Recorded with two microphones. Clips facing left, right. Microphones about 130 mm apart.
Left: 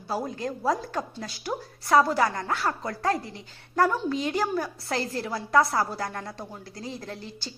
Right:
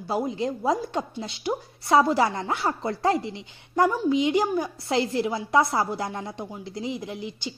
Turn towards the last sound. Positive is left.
turn(degrees=-15)  # may be behind; listen again after turning